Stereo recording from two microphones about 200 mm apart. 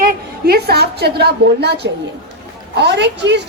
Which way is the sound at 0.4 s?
50° right (ahead or behind).